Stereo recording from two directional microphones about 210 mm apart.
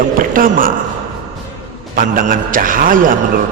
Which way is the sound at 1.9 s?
40° right (ahead or behind).